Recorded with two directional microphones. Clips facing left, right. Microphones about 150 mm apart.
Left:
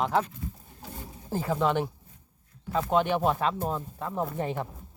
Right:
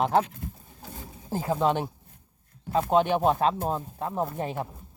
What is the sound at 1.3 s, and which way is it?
Speech, 15° right (ahead or behind).